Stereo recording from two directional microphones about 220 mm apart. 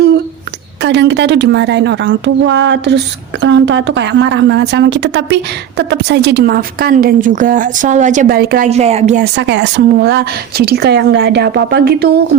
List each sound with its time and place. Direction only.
0.8 s a woman's voice: 50° right (ahead or behind); by 9.2 s 30° right (ahead or behind)
9.2 s a woman's voice: 55° right (ahead or behind)